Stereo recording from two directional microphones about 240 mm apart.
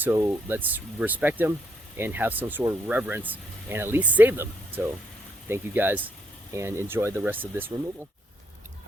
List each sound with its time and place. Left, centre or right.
0.0 s speech: centre